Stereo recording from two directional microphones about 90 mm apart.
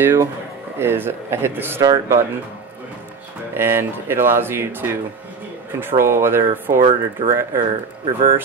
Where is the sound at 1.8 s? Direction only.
40° right (ahead or behind).